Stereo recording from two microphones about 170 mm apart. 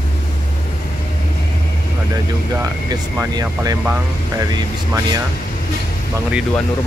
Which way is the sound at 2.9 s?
20° right (ahead or behind).